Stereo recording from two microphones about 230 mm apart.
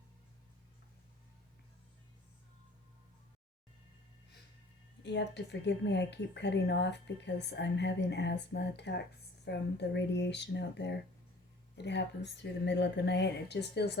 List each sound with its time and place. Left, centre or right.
5.0 s speech: left